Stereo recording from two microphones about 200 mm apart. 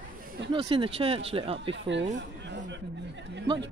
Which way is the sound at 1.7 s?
65° right (ahead or behind).